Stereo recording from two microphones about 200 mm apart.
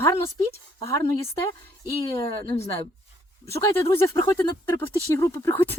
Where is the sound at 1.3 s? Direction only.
15° left (ahead or behind).